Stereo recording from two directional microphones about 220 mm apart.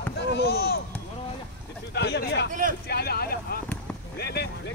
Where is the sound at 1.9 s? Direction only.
50° left (ahead or behind).